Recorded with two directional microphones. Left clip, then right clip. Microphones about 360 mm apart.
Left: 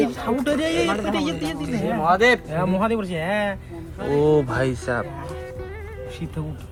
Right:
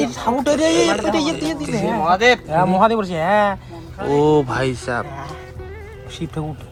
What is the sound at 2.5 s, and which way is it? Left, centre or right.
Speech, centre.